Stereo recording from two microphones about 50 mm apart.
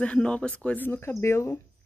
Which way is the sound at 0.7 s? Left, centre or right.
Left.